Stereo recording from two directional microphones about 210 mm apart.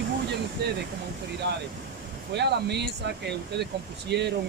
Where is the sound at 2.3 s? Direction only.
55° right (ahead or behind).